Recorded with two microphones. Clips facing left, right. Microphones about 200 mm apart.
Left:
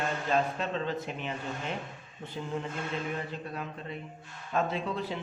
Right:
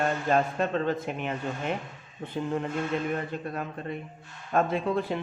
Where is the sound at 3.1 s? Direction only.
50° right (ahead or behind).